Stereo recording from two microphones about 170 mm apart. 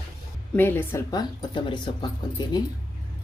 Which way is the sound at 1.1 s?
25° left (ahead or behind).